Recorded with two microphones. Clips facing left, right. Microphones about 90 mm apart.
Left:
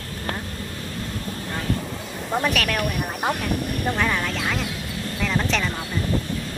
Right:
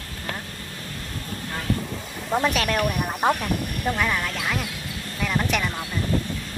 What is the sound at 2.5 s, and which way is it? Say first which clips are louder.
Speech: right 1 dB; 20° right (ahead or behind).